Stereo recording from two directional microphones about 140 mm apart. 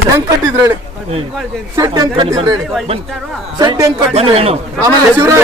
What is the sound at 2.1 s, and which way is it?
Speech, 35° right (ahead or behind).